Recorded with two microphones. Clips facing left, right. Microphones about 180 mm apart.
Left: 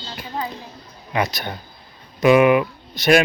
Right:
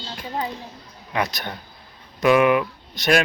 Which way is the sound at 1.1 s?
Centre (ahead or behind).